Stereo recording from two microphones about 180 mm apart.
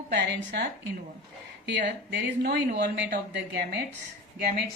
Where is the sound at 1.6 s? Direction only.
75° right (ahead or behind).